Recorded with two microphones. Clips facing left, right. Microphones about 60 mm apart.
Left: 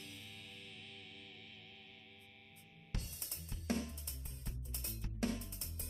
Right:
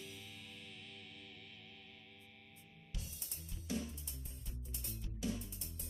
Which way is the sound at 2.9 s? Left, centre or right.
Left.